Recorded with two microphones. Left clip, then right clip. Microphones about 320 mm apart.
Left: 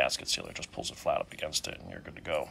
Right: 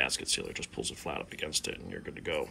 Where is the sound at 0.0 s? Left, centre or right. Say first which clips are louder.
Left 1 dB; centre.